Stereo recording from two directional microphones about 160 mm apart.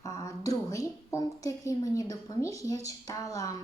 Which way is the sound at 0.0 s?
20° left (ahead or behind).